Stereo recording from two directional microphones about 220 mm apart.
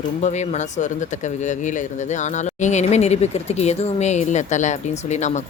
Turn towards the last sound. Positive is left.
turn(degrees=30)  # may be behind; listen again after turning